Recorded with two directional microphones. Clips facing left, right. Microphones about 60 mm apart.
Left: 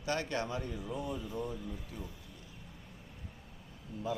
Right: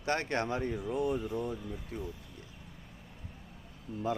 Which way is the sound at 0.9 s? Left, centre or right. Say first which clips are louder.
Right 7 dB; right.